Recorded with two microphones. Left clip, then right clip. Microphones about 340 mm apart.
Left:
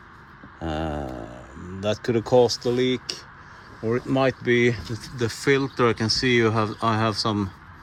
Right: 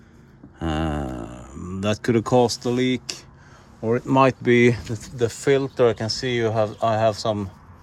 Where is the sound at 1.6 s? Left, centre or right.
Right.